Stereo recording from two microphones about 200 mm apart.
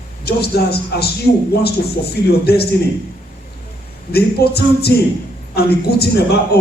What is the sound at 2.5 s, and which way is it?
Speech, 50° left (ahead or behind).